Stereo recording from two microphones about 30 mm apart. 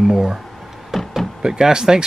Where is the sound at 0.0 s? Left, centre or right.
Centre.